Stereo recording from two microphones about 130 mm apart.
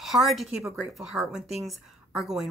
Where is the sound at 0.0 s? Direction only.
Centre (ahead or behind).